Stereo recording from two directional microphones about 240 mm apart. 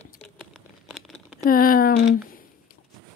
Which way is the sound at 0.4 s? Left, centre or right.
Centre.